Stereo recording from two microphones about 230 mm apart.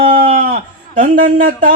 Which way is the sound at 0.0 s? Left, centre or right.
Right.